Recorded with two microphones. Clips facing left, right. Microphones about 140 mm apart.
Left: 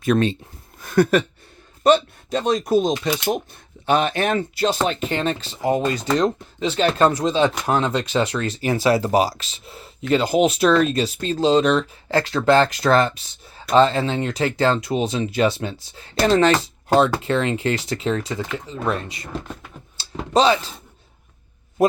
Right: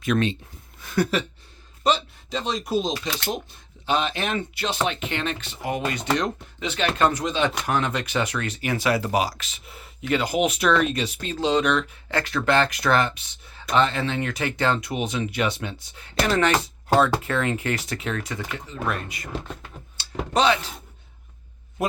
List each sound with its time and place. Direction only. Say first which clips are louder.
0.0 s speech: left 4 dB; 35° left (ahead or behind)
0.8 s a sound: left 7 dB; 50° left (ahead or behind)
1.8 s speech: left 7 dB; 50° left (ahead or behind); by 19.3 s 25° left (ahead or behind)
20.0 s computer keyboard: left 4 dB; 30° left (ahead or behind)
21.8 s speech: left 9 dB; 35° left (ahead or behind)